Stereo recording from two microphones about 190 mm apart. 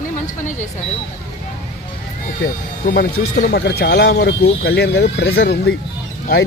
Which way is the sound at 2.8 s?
50° left (ahead or behind).